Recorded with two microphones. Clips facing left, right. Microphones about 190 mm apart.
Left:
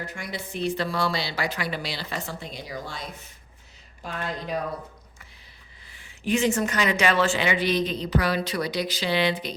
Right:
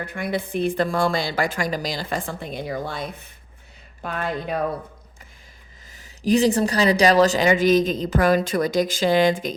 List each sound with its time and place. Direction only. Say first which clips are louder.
0.0 s speech: right 8 dB; 55° right (ahead or behind)
5.9 s speech: right 6 dB; 40° right (ahead or behind)